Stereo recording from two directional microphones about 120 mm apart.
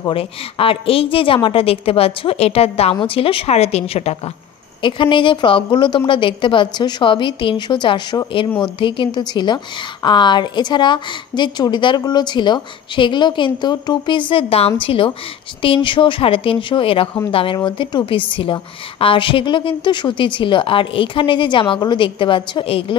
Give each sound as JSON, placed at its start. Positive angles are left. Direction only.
{"t": 0.1, "sound": "a woman's voice", "side_deg": 50}
{"t": 4.8, "sound": "a woman's voice", "side_deg": 45}